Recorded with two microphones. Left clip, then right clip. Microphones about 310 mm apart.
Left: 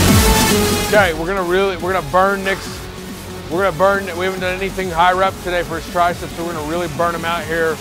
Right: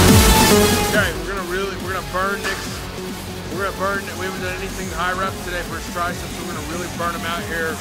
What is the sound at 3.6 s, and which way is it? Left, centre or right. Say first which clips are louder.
Speech: left 8 dB; left.